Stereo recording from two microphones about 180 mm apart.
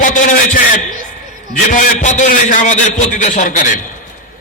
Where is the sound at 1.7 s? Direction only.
45° left (ahead or behind).